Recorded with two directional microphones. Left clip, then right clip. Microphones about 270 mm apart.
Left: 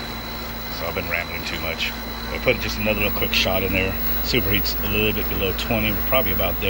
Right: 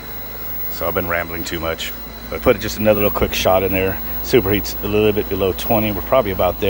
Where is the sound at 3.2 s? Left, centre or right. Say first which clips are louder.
Right 5 dB; centre.